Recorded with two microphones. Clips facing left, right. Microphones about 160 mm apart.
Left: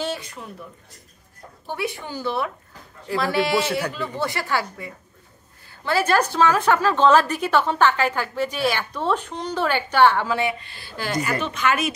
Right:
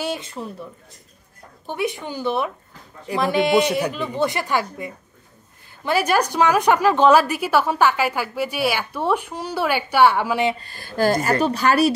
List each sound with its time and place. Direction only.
0.2 s speech: 25° right (ahead or behind)
1.7 s a woman's voice: 20° right (ahead or behind)
10.6 s speech: 45° right (ahead or behind)